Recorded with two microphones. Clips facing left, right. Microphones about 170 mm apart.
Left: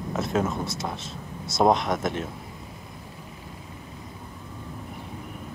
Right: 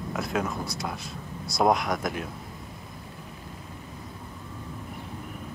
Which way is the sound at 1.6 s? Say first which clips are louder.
Left 2 dB; 25° left (ahead or behind).